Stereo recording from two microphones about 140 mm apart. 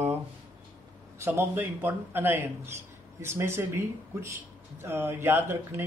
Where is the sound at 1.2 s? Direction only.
15° right (ahead or behind).